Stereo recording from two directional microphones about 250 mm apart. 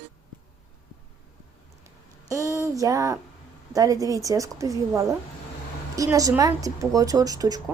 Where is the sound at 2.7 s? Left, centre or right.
Centre.